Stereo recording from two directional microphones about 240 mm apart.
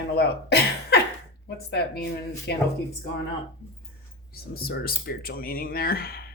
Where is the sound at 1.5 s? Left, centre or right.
Left.